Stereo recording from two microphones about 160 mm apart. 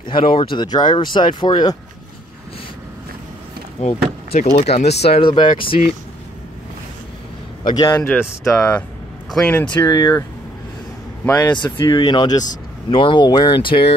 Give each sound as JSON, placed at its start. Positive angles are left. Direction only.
{"t": 0.0, "sound": "speech", "side_deg": 35}
{"t": 3.8, "sound": "speech", "side_deg": 45}
{"t": 7.6, "sound": "speech", "side_deg": 25}
{"t": 7.9, "sound": "speech", "side_deg": 10}
{"t": 9.8, "sound": "speech", "side_deg": 20}
{"t": 11.2, "sound": "speech", "side_deg": 15}
{"t": 11.5, "sound": "speech", "side_deg": 30}